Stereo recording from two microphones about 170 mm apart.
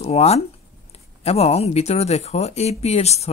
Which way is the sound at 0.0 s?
40° left (ahead or behind).